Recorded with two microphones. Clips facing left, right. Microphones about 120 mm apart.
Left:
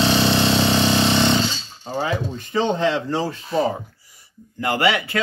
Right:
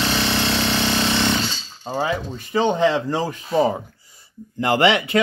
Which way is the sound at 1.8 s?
15° right (ahead or behind).